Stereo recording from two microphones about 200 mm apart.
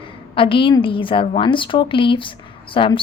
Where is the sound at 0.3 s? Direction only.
25° left (ahead or behind).